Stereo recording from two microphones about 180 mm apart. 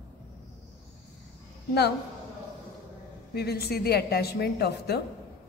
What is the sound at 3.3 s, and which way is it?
A woman's voice, 60° left (ahead or behind).